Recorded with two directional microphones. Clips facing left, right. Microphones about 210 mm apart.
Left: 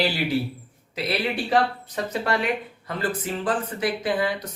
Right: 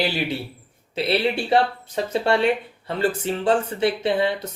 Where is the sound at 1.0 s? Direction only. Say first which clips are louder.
Right 4 dB; 30° right (ahead or behind).